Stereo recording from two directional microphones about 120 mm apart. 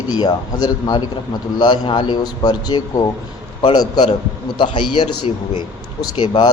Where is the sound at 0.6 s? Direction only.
35° left (ahead or behind).